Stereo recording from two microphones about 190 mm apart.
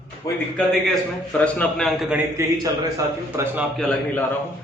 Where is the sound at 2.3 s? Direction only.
15° right (ahead or behind).